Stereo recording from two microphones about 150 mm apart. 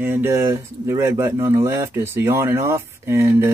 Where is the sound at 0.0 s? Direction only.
15° right (ahead or behind).